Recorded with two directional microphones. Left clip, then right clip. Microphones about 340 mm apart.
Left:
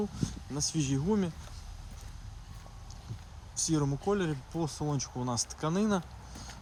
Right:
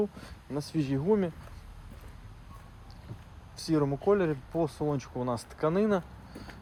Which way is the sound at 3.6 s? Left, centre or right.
Centre.